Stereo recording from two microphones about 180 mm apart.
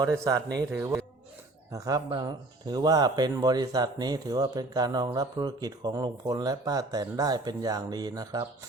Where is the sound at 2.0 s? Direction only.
25° right (ahead or behind).